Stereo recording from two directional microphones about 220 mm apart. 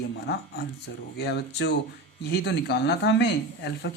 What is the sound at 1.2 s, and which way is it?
Speech, 50° left (ahead or behind).